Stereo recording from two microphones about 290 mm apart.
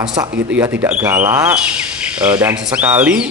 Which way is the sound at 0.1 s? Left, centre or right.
Centre.